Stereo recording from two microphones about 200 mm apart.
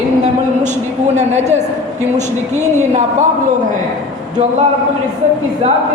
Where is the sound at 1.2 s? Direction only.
35° right (ahead or behind).